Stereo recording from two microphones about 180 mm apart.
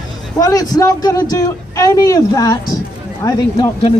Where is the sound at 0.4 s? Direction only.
20° left (ahead or behind).